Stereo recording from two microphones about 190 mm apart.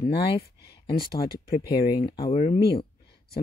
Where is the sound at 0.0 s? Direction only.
60° left (ahead or behind).